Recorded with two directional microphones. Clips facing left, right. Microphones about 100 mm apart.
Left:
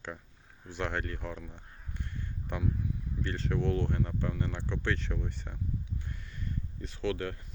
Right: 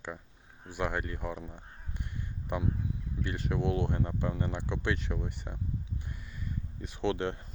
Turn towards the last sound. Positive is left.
turn(degrees=-25)  # may be behind; listen again after turning